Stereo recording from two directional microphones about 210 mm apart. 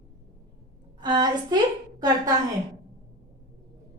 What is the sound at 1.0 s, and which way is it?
A woman's voice, 20° right (ahead or behind).